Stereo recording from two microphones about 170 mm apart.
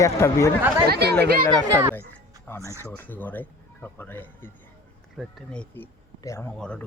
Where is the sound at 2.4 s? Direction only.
15° left (ahead or behind).